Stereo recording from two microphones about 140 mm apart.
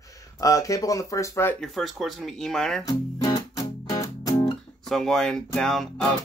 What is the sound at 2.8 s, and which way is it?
Music, 25° left (ahead or behind).